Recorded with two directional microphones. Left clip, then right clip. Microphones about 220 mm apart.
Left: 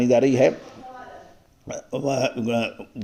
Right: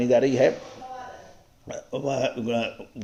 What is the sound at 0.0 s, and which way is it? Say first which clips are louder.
Speech: left 2 dB; 30° left (ahead or behind).